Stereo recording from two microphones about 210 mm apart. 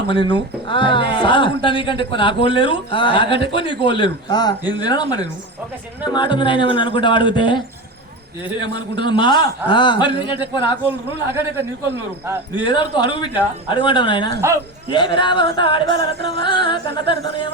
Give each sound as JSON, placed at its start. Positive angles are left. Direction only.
{"t": 0.1, "sound": "speech", "side_deg": 25}
{"t": 9.0, "sound": "speech", "side_deg": 20}
{"t": 10.8, "sound": "a man's voice", "side_deg": -10}
{"t": 12.6, "sound": "speech", "side_deg": 20}